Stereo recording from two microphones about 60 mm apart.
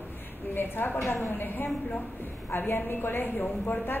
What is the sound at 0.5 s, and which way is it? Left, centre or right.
A woman's voice, left.